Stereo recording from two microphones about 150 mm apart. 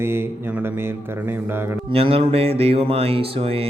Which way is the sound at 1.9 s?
40° right (ahead or behind).